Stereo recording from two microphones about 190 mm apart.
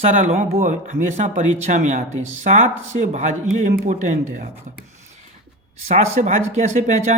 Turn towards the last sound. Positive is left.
turn(degrees=-40)  # may be behind; listen again after turning